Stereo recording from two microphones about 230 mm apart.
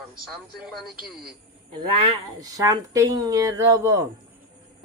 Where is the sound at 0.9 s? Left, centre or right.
Right.